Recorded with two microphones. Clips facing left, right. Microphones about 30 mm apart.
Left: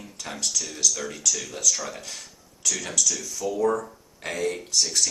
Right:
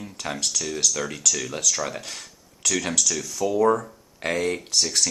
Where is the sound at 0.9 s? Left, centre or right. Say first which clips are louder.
Right 3 dB; right.